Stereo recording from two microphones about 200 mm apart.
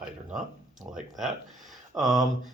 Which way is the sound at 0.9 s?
35° right (ahead or behind).